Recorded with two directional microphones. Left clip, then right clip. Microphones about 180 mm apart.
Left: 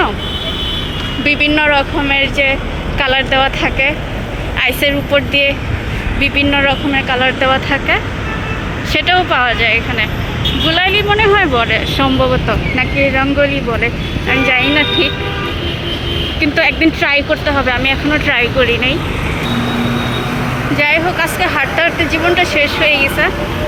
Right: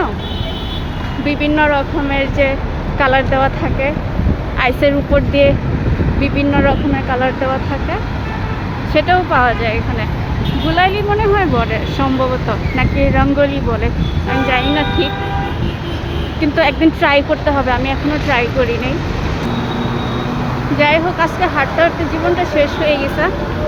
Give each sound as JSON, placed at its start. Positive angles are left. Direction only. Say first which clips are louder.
{"t": 1.2, "sound": "speech", "louder": "left 2 dB", "side_deg": -5}
{"t": 4.6, "sound": "speech", "louder": "even", "side_deg": -20}
{"t": 6.1, "sound": "speech", "louder": "left 4 dB", "side_deg": -10}
{"t": 16.4, "sound": "speech", "louder": "even", "side_deg": -5}
{"t": 20.7, "sound": "speech", "louder": "even", "side_deg": -10}